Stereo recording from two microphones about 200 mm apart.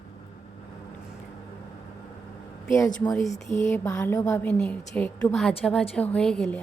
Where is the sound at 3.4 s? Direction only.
15° left (ahead or behind).